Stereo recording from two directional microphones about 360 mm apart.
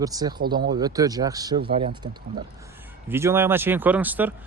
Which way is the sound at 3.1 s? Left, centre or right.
Centre.